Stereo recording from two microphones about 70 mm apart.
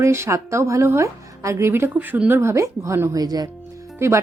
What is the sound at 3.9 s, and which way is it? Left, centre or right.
Speech, right.